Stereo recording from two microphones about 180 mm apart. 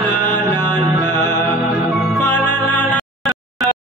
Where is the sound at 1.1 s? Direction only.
10° left (ahead or behind).